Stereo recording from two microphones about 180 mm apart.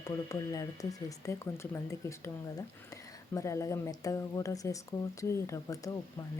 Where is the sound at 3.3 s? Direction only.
15° left (ahead or behind).